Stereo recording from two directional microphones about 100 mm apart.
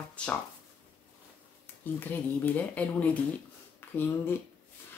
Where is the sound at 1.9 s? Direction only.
15° left (ahead or behind).